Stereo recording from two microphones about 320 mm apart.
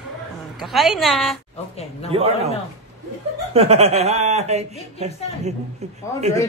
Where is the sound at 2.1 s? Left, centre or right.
Centre.